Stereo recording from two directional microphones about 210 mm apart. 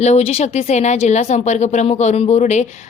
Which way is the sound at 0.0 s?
30° left (ahead or behind).